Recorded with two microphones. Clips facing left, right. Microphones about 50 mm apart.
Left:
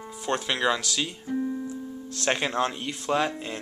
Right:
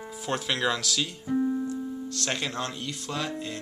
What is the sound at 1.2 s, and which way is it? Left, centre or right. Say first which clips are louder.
Keyboard: right 6 dB; centre.